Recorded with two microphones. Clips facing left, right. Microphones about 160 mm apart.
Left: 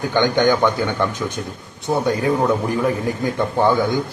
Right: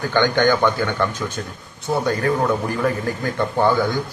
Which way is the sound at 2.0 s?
15° left (ahead or behind).